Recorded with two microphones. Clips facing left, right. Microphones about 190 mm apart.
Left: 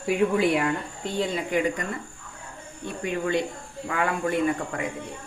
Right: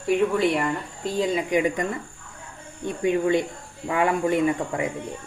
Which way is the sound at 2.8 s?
20° right (ahead or behind).